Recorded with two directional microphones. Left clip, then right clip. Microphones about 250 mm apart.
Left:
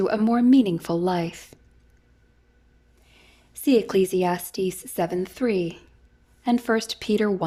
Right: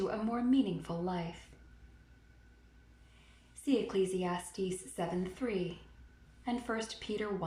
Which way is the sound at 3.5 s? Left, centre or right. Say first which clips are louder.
Left 13 dB; left.